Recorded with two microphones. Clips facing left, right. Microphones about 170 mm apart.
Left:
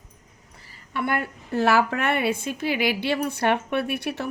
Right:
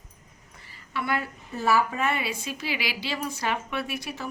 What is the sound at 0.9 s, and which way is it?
A woman's voice, 55° left (ahead or behind).